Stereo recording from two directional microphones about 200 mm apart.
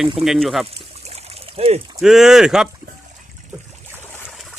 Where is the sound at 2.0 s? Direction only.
Centre (ahead or behind).